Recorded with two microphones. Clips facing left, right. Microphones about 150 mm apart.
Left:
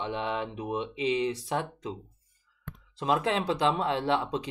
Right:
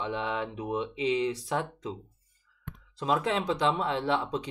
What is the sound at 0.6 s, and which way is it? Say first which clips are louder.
Speech: even; 5° left (ahead or behind).